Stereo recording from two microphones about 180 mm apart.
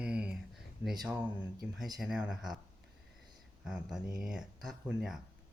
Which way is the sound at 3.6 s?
5° right (ahead or behind).